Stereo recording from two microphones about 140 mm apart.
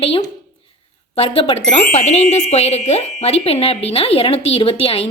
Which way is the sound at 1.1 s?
40° left (ahead or behind).